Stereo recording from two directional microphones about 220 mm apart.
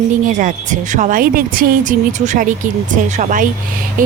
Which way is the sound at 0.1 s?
35° right (ahead or behind).